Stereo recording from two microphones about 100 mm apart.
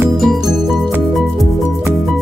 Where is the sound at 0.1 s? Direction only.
Centre (ahead or behind).